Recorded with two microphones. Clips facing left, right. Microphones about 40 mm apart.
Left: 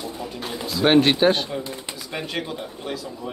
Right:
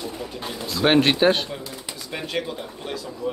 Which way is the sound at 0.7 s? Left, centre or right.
Centre.